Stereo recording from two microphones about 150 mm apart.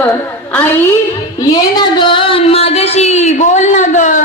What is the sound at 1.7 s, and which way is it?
Speech, 30° left (ahead or behind).